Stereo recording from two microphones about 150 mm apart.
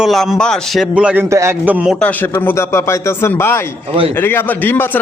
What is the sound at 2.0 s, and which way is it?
A man's voice, 10° left (ahead or behind).